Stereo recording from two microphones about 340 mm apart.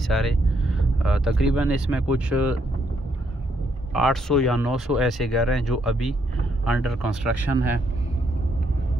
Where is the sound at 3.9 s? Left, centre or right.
Centre.